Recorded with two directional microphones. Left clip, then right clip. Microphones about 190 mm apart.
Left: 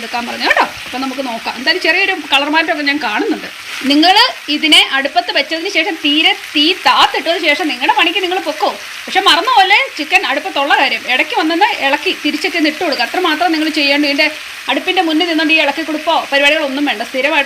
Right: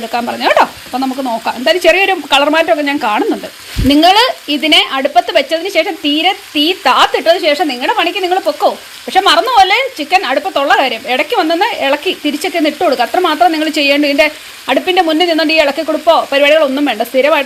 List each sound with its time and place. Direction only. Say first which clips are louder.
0.1 s speech: right 2 dB; 40° right (ahead or behind)